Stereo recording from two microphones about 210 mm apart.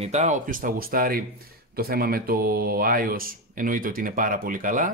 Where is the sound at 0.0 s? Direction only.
30° right (ahead or behind).